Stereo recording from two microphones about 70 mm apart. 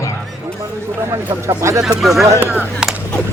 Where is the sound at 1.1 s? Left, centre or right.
Right.